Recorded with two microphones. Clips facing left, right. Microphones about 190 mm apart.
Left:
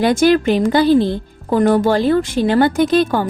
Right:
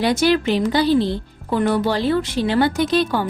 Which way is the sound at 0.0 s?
50° left (ahead or behind).